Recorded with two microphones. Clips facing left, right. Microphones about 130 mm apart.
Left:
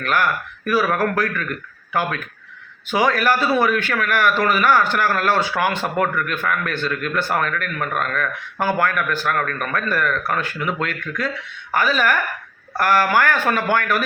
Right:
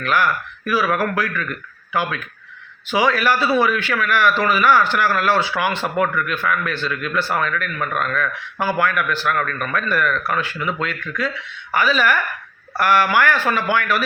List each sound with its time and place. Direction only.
0.0 s a man's voice: 45° left (ahead or behind)